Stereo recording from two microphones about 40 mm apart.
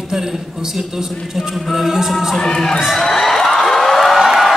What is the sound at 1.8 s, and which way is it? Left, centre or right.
Music, centre.